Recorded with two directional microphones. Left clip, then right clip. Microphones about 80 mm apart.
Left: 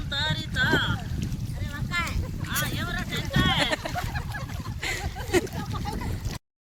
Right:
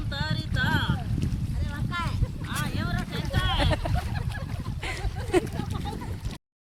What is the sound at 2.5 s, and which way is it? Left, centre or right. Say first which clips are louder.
Vehicle: left 3 dB; centre.